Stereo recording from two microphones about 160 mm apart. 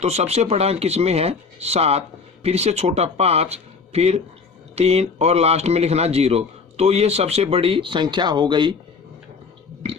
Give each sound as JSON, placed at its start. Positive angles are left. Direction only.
{"t": 0.0, "sound": "speech", "side_deg": -40}